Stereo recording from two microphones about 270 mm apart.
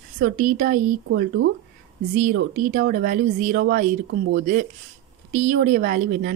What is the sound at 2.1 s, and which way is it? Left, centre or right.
A woman's voice, right.